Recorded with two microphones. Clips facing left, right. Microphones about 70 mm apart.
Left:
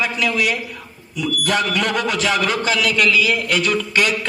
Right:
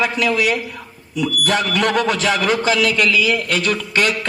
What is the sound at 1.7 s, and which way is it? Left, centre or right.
A man's voice, right.